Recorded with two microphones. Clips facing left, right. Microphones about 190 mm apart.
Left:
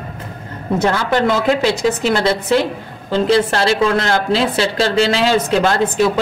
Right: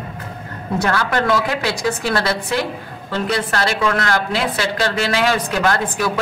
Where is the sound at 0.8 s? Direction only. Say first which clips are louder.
Left 3 dB; 20° left (ahead or behind).